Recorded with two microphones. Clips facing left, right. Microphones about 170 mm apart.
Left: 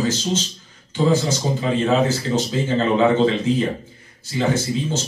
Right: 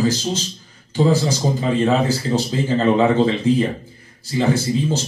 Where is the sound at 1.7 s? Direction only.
35° right (ahead or behind).